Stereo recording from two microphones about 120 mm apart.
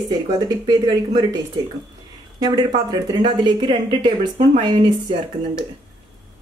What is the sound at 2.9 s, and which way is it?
Speech, 35° right (ahead or behind).